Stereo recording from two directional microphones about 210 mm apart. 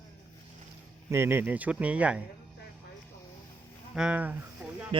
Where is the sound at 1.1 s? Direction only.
10° right (ahead or behind).